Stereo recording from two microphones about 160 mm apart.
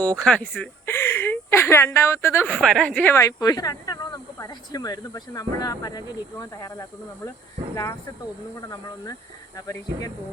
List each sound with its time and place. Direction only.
0.0 s speech: 5° left (ahead or behind)
2.6 s speech: 5° left (ahead or behind); by 6.8 s 20° left (ahead or behind)
8.6 s speech: 20° left (ahead or behind)